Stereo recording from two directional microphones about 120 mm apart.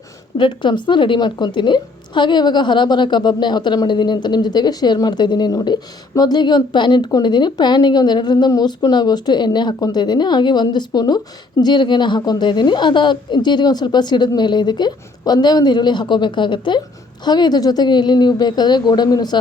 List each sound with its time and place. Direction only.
0.3 s a woman's voice: 40° left (ahead or behind)